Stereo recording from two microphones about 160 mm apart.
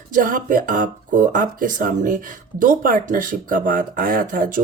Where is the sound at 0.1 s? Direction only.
60° right (ahead or behind).